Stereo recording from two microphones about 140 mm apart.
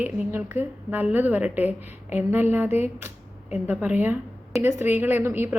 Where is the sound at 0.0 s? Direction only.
15° right (ahead or behind).